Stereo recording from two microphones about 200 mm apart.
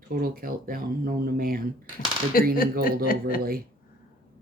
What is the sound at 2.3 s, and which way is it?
Speech, 45° left (ahead or behind).